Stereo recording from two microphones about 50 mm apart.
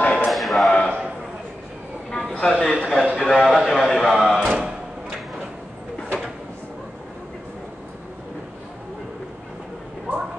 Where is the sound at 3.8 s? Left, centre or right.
Centre.